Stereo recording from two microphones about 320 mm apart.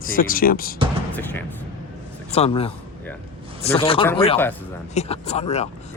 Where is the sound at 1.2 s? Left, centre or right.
Centre.